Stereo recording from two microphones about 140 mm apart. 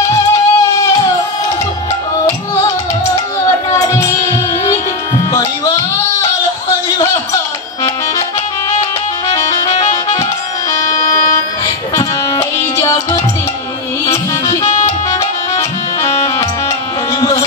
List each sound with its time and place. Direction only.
0.0 s music: 20° left (ahead or behind)
3.7 s music: 25° left (ahead or behind)
5.3 s music: 25° left (ahead or behind)
9.3 s music: 25° left (ahead or behind)
11.9 s music: 25° left (ahead or behind)
15.0 s music: 25° left (ahead or behind)
17.2 s a sound: 25° left (ahead or behind)